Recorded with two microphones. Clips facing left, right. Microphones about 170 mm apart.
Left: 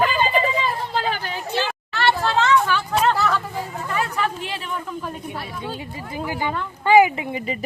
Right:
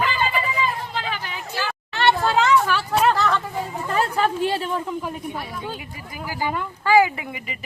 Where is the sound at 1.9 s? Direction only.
20° right (ahead or behind).